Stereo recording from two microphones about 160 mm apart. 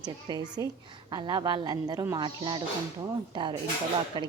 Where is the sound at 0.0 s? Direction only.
25° right (ahead or behind).